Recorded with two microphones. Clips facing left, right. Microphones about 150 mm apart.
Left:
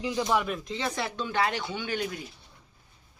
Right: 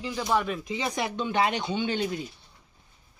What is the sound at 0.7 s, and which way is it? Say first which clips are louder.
Speech: right 2 dB; 15° right (ahead or behind).